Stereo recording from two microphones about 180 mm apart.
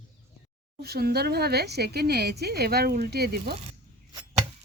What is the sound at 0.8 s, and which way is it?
Speech, 60° right (ahead or behind).